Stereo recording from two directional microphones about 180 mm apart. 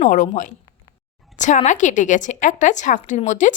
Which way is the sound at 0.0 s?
45° left (ahead or behind).